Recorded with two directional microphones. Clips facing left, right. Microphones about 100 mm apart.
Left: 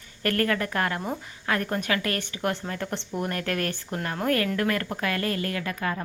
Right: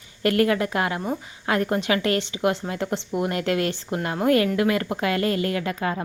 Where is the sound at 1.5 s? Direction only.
20° right (ahead or behind).